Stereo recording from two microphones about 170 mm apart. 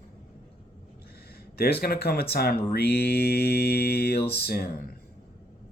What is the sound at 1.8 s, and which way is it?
Speech, 65° left (ahead or behind).